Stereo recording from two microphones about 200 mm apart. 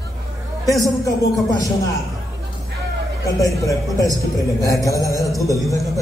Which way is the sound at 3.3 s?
15° left (ahead or behind).